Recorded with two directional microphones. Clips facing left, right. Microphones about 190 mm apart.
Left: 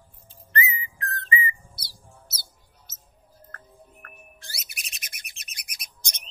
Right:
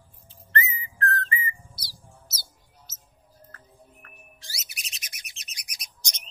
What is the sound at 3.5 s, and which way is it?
Bird, 55° left (ahead or behind).